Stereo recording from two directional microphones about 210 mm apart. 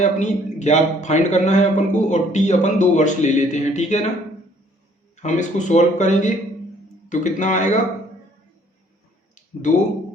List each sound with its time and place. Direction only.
0.0 s a man's voice: 35° left (ahead or behind)
5.1 s a man's voice: 35° left (ahead or behind)
9.3 s a sound: 35° left (ahead or behind)